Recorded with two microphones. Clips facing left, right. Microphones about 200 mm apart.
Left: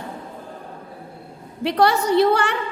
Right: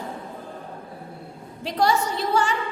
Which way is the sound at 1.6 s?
65° left (ahead or behind).